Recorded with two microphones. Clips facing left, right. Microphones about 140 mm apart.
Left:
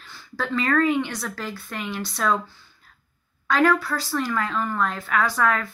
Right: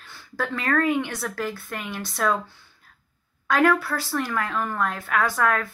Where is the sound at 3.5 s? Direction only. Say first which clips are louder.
Even; 55° right (ahead or behind).